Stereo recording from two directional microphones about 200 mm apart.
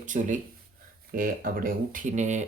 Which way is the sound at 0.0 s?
40° right (ahead or behind).